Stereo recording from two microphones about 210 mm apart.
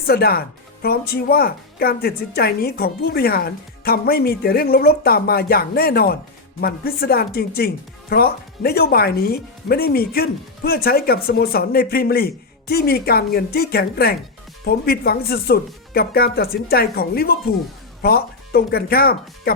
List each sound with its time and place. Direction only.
0.1 s speech: 45° left (ahead or behind)